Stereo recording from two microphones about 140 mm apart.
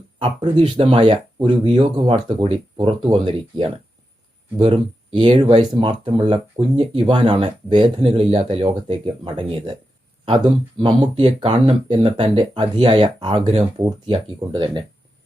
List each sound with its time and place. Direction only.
0.2 s speech: 40° right (ahead or behind)
1.6 s speech: 35° right (ahead or behind)
4.7 s speech: 35° right (ahead or behind)
10.8 s speech: 35° right (ahead or behind)
13.4 s speech: 50° right (ahead or behind)
14.1 s speech: 35° right (ahead or behind)